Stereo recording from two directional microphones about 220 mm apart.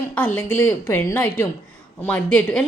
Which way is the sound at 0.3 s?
10° left (ahead or behind).